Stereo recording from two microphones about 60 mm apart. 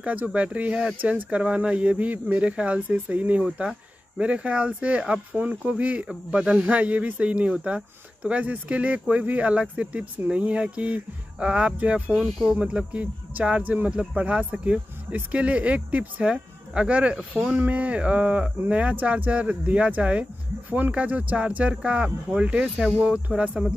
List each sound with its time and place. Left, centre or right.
0.0 s speech: right